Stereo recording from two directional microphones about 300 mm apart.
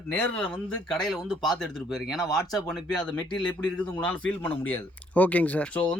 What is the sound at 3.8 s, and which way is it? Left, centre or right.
Speech, centre.